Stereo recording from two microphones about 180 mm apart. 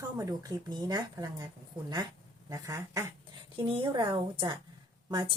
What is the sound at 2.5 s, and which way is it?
A woman's voice, 20° right (ahead or behind).